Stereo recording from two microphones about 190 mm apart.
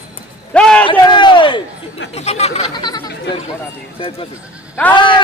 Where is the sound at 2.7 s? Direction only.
20° left (ahead or behind).